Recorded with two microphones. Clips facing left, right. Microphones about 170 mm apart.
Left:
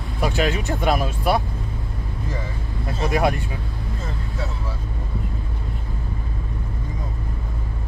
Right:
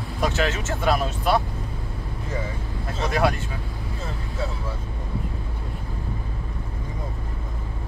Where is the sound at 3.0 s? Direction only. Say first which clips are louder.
Left 2 dB; 15° left (ahead or behind).